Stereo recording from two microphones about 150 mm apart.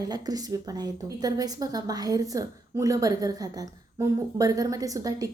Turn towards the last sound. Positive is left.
turn(degrees=-25)  # may be behind; listen again after turning